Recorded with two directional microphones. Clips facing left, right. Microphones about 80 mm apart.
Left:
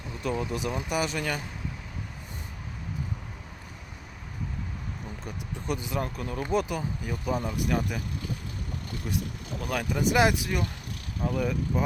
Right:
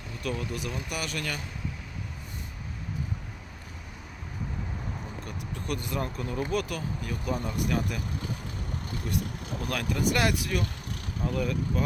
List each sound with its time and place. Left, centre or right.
0.2 s speech: left
5.6 s speech: centre
6.5 s speech: left
9.6 s speech: centre